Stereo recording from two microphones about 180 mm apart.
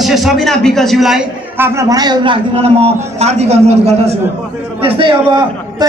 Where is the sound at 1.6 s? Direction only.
15° right (ahead or behind).